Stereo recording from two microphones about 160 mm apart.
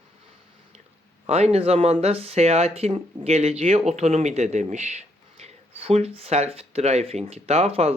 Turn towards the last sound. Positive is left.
turn(degrees=-40)  # may be behind; listen again after turning